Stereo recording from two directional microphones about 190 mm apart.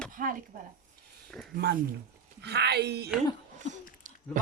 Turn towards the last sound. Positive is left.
turn(degrees=-40)  # may be behind; listen again after turning